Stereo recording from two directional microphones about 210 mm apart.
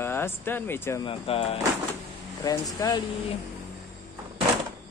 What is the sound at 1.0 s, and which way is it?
Speech, 25° left (ahead or behind).